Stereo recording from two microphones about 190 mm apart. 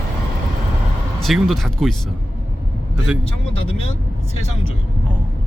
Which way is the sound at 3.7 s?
35° left (ahead or behind).